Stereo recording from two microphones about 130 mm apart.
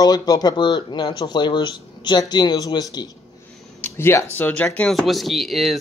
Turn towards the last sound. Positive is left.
turn(degrees=0)  # may be behind; listen again after turning